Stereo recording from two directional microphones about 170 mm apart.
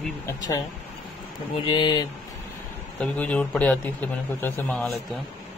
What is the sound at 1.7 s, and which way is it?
Speech, 25° left (ahead or behind).